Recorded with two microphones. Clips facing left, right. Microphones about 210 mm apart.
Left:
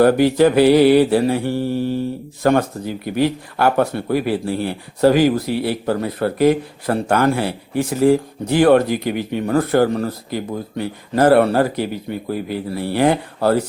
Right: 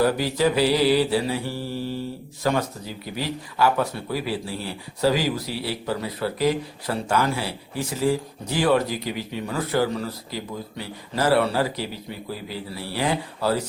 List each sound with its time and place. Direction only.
0.0 s speech: 60° left (ahead or behind)